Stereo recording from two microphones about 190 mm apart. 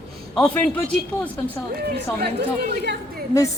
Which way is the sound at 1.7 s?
55° right (ahead or behind).